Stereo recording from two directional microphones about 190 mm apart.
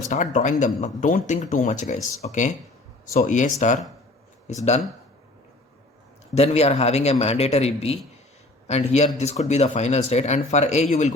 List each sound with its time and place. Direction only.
0.1 s speech: 40° left (ahead or behind)
6.3 s a man's voice: 35° left (ahead or behind)